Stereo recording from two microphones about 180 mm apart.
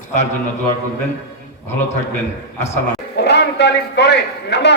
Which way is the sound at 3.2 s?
65° left (ahead or behind).